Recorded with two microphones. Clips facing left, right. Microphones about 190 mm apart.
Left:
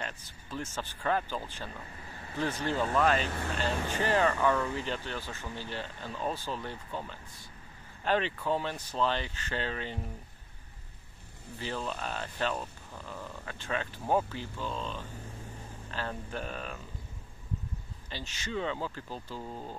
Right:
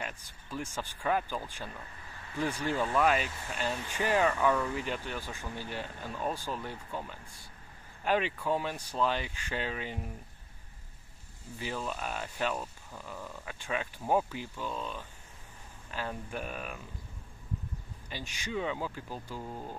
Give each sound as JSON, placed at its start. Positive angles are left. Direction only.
{"t": 0.0, "sound": "speech", "side_deg": -10}
{"t": 2.6, "sound": "speech", "side_deg": -10}
{"t": 3.3, "sound": "speech", "side_deg": 65}
{"t": 4.0, "sound": "speech", "side_deg": -10}
{"t": 11.5, "sound": "speech", "side_deg": -10}
{"t": 18.1, "sound": "speech", "side_deg": -15}